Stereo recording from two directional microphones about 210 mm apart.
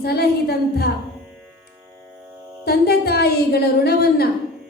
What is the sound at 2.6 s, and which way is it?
Music, 50° left (ahead or behind).